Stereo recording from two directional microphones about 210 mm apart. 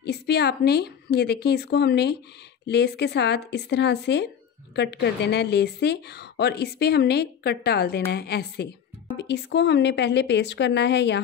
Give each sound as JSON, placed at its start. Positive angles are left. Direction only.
{"t": 0.0, "sound": "a woman's voice", "side_deg": 50}